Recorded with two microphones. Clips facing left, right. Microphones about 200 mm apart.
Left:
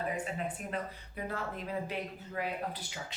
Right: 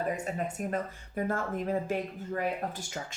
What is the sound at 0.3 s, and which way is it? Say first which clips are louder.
Speech: right 5 dB; 45° right (ahead or behind).